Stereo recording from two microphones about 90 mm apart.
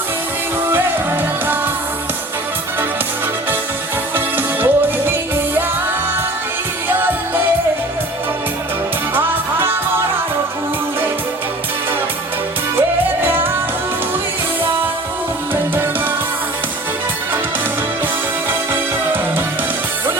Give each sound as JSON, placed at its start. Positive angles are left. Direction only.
{"t": 0.7, "sound": "music", "side_deg": -20}
{"t": 4.1, "sound": "music", "side_deg": -20}
{"t": 9.1, "sound": "music", "side_deg": -25}